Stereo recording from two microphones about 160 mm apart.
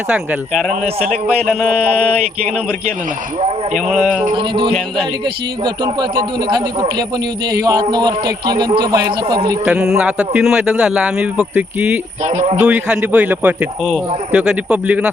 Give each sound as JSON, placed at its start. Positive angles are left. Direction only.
{"t": 0.1, "sound": "a man's voice", "side_deg": -5}
{"t": 0.7, "sound": "a man's voice", "side_deg": -45}
{"t": 3.4, "sound": "a man's voice", "side_deg": -50}
{"t": 3.8, "sound": "speech", "side_deg": -5}
{"t": 4.4, "sound": "a man's voice", "side_deg": -30}
{"t": 9.6, "sound": "a man's voice", "side_deg": -5}
{"t": 12.2, "sound": "a man's voice", "side_deg": -45}
{"t": 12.6, "sound": "a man's voice", "side_deg": -10}